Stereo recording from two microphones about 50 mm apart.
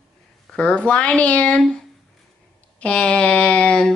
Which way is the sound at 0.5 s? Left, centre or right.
Left.